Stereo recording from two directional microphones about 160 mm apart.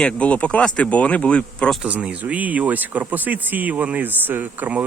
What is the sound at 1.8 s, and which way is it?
Speech, 5° right (ahead or behind).